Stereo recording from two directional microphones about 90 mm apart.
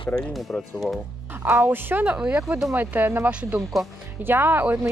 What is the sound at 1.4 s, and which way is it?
Speech, 20° right (ahead or behind).